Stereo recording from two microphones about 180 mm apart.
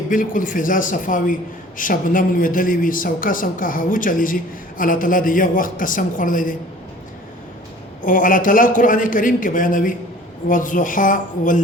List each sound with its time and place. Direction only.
0.1 s a woman's voice: 50° left (ahead or behind)
8.0 s a woman's voice: 50° left (ahead or behind)